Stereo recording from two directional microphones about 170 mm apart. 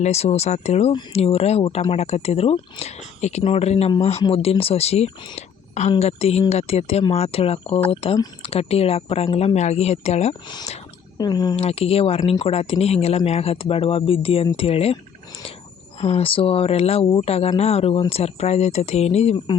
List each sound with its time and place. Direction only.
0.0 s speech: 40° left (ahead or behind)
11.2 s speech: 25° left (ahead or behind)
11.5 s speech: 35° left (ahead or behind)
16.0 s speech: 35° left (ahead or behind)